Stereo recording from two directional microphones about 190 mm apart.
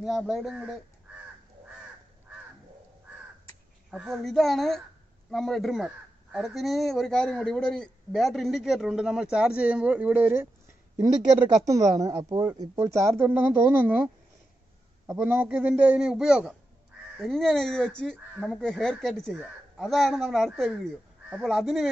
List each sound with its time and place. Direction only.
0.0 s speech: centre (ahead or behind)
3.9 s speech: centre (ahead or behind)
15.1 s speech: 10° right (ahead or behind)